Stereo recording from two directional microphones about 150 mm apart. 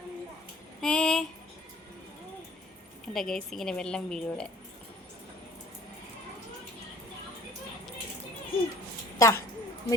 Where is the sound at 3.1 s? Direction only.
Centre (ahead or behind).